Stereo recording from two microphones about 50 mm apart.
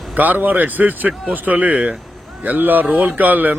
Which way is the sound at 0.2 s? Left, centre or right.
Right.